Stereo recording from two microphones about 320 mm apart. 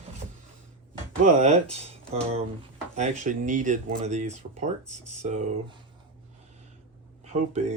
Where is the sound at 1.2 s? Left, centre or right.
Right.